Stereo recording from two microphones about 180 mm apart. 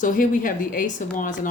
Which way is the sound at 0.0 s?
50° left (ahead or behind).